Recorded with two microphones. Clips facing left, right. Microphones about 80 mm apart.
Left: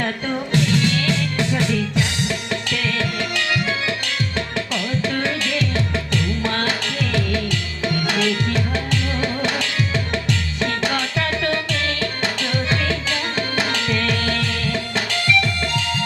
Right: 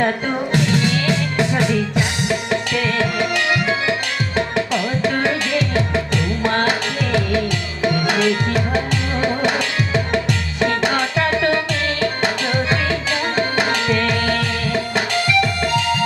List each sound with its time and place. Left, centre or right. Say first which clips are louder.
0.0 s music: right 4 dB; right
4.4 s tabla: right 9 dB; centre
6.4 s music: right 4 dB; centre
8.0 s tabla: right 2 dB; centre
10.6 s music: right 6 dB; centre